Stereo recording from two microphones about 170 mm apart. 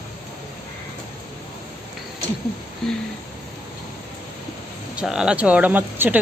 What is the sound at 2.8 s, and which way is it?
Speech, centre (ahead or behind).